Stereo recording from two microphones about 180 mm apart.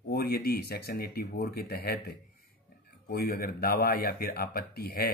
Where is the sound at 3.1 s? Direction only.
55° left (ahead or behind).